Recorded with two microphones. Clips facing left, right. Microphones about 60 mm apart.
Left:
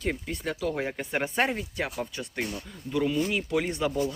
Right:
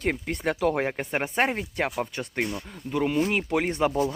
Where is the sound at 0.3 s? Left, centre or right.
Right.